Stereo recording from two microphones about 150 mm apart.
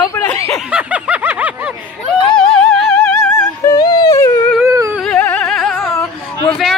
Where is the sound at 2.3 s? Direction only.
5° left (ahead or behind).